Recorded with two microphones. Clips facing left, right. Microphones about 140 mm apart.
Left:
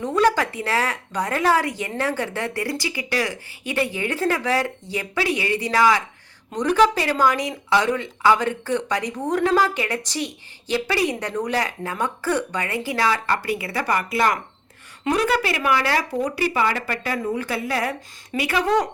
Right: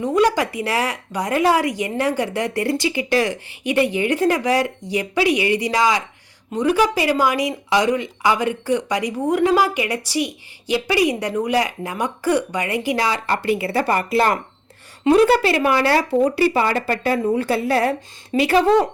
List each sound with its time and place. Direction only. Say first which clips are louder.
0.0 s speech: right 2 dB; 15° right (ahead or behind); by 18.9 s 30° right (ahead or behind)